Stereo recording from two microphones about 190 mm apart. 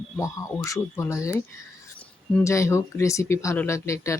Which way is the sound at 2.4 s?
15° left (ahead or behind).